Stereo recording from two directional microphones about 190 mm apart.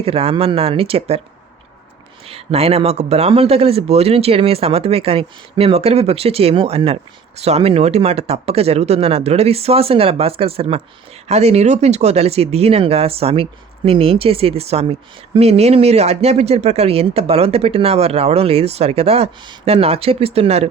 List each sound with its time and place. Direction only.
0.0 s speech: 30° right (ahead or behind)
2.2 s speech: 30° right (ahead or behind)